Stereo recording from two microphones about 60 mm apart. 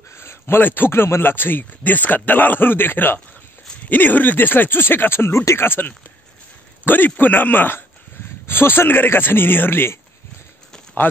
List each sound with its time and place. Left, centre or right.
0.1 s a man's voice: left